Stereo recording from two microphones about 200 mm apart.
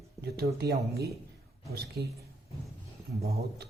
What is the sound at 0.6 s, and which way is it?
Speech, 50° right (ahead or behind).